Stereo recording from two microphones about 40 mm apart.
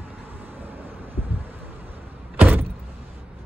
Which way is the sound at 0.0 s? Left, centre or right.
Right.